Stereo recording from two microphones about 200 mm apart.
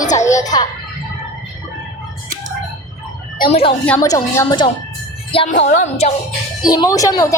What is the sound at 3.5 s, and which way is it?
A woman's voice, 30° left (ahead or behind).